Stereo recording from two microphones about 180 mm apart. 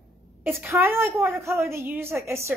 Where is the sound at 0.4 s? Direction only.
10° right (ahead or behind).